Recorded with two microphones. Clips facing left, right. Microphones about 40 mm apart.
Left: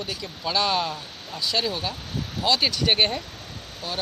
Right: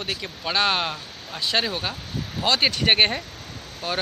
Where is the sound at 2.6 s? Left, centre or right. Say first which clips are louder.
Right 2 dB; right.